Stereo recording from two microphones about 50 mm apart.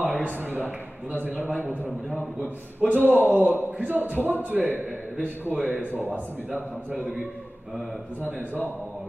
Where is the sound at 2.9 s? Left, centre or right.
Right.